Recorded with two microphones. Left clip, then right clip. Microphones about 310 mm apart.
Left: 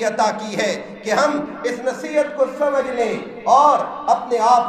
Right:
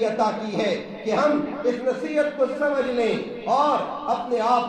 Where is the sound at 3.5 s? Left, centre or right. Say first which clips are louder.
Left 8 dB; left.